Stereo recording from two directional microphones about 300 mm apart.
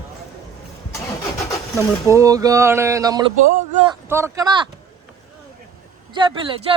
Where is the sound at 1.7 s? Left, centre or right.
Centre.